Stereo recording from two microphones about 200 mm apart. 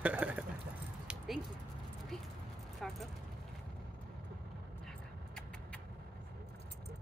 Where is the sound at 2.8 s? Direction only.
Centre (ahead or behind).